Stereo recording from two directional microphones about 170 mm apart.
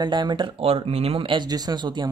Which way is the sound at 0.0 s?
25° right (ahead or behind).